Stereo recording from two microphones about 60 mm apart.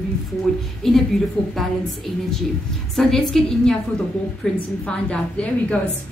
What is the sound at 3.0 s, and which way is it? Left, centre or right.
A woman's voice, centre.